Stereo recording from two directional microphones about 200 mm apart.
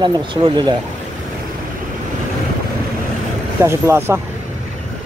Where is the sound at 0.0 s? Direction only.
25° right (ahead or behind).